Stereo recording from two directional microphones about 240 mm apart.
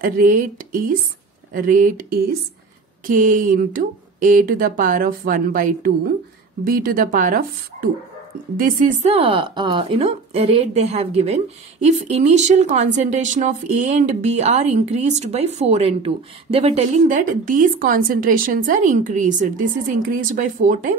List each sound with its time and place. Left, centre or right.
0.0 s speech: right